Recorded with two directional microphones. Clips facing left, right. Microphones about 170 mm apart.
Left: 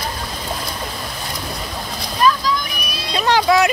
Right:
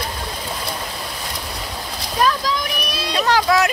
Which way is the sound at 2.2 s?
85° right.